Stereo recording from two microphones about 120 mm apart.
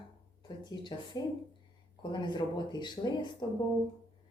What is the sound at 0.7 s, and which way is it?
A woman's voice, 35° left (ahead or behind).